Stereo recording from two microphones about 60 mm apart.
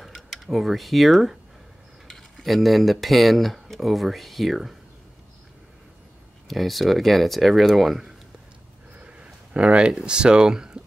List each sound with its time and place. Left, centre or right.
0.0 s speech: centre
6.4 s speech: centre
8.9 s a sound: right
9.9 s speech: centre